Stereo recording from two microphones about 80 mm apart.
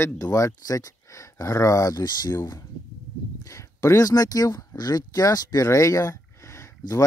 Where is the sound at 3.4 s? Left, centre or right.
Left.